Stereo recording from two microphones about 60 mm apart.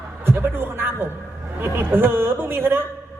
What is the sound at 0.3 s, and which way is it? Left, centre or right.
A man's voice, right.